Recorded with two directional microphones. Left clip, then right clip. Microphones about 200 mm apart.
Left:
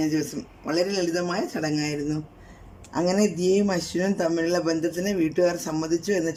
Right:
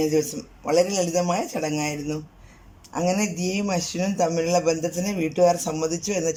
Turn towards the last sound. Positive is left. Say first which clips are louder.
# even
turn(degrees=-15)  # may be behind; listen again after turning